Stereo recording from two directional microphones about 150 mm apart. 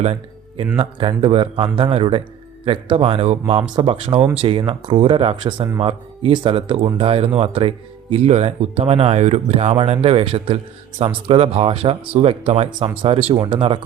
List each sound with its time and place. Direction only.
0.0 s speech: 45° right (ahead or behind)